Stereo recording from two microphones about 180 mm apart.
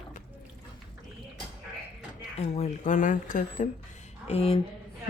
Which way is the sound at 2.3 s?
35° left (ahead or behind).